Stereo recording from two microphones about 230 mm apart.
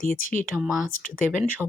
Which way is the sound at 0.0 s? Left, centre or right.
Left.